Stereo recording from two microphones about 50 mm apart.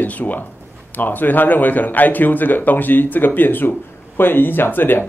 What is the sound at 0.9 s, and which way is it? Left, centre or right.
A man's voice, left.